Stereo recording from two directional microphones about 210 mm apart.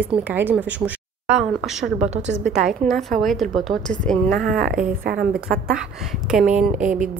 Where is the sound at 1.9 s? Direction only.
30° right (ahead or behind).